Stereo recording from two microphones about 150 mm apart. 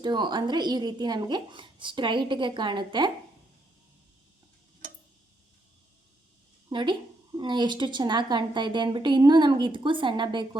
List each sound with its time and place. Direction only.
0.0 s a woman's voice: 30° right (ahead or behind)
6.7 s a woman's voice: 30° right (ahead or behind)